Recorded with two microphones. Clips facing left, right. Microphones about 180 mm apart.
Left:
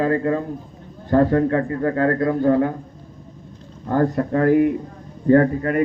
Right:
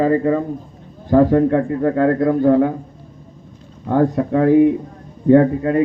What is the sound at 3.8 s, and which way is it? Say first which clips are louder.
A man's voice: right 3 dB; centre (ahead or behind).